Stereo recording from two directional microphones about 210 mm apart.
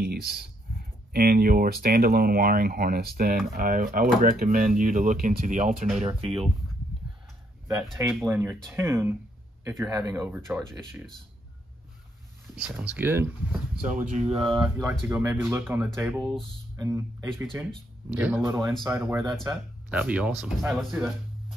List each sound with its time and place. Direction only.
0.0 s speech: 45° right (ahead or behind); by 6.5 s 25° right (ahead or behind)
7.9 s speech: centre (ahead or behind)
8.3 s speech: 10° right (ahead or behind)
12.5 s speech: 5° right (ahead or behind)
13.8 s speech: 35° right (ahead or behind)
14.3 s speech: 25° right (ahead or behind)
14.9 s speech: 10° right (ahead or behind)